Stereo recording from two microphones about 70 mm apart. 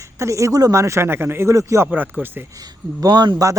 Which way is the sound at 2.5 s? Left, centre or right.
Right.